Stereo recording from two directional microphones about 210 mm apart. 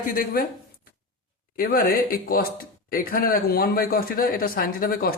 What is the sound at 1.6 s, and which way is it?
Speech, 45° left (ahead or behind).